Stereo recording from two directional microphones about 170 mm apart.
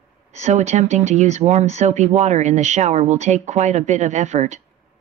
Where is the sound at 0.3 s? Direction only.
45° right (ahead or behind).